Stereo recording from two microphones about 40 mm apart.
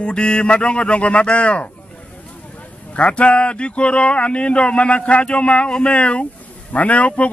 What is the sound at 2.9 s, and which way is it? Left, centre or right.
Speech, left.